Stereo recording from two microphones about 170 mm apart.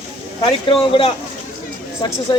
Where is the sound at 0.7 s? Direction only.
30° left (ahead or behind).